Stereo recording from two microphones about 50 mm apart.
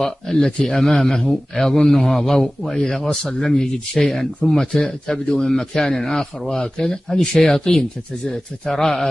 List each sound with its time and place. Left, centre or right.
0.0 s a man's voice: centre